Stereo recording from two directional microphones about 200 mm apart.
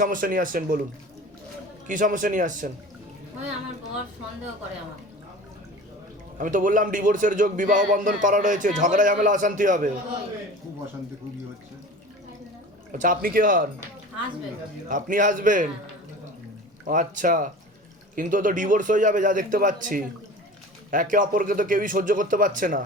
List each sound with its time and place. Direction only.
0.0 s a man's voice: 45° right (ahead or behind)
1.9 s a man's voice: 40° right (ahead or behind)
6.4 s a man's voice: 40° right (ahead or behind)
12.9 s a man's voice: 40° right (ahead or behind)
14.8 s a man's voice: 40° right (ahead or behind)
16.8 s a man's voice: 40° right (ahead or behind)